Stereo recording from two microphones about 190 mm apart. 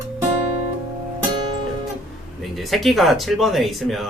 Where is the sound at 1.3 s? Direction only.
25° right (ahead or behind).